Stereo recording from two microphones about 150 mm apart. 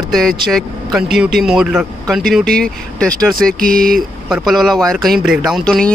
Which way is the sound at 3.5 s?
70° right (ahead or behind).